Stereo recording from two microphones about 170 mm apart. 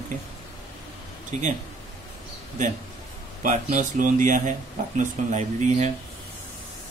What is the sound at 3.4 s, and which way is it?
Speech, 50° right (ahead or behind).